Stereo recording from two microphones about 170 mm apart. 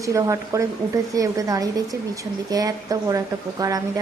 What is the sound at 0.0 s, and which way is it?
A woman's voice, 20° right (ahead or behind).